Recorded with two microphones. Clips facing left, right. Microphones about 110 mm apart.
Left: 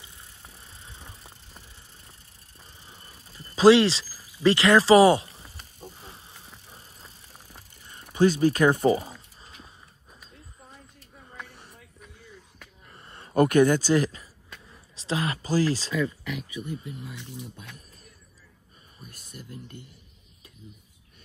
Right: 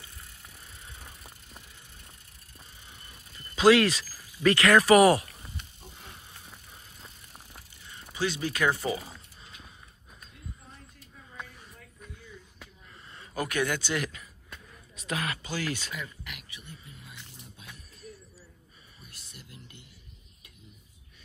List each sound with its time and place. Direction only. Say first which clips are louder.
0.0 s vehicle: left 1 dB; 30° left (ahead or behind)
2.9 s a sound: left 2 dB; 30° left (ahead or behind)
4.2 s speech: left 2 dB; 25° left (ahead or behind)
5.5 s snake: left 2 dB; 40° left (ahead or behind)
8.1 s speech: left 10 dB; 45° left (ahead or behind)
13.4 s speech: left 11 dB; 45° left (ahead or behind)
18.9 s a sound: left 7 dB; 45° left (ahead or behind)